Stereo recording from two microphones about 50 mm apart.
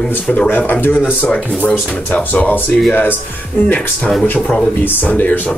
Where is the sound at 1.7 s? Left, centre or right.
Left.